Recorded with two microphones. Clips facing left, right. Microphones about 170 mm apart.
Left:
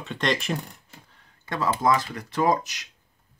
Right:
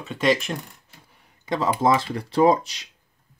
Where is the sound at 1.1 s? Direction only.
15° right (ahead or behind).